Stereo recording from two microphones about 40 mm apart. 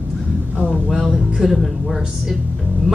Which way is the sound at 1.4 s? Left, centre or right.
Centre.